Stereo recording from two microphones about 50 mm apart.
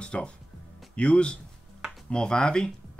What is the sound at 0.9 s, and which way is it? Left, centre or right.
Speech, left.